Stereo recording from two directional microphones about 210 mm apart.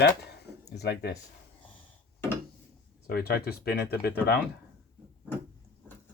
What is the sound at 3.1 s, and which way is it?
Speech, 45° left (ahead or behind).